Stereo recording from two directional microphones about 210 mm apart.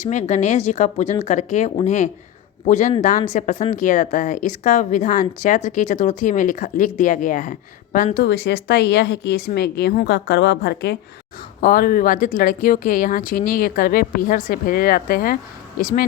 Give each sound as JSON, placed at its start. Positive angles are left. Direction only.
{"t": 0.0, "sound": "speech", "side_deg": 35}
{"t": 8.2, "sound": "speech", "side_deg": 55}